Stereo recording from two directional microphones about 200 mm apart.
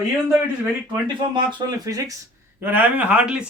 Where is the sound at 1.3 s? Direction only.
20° right (ahead or behind).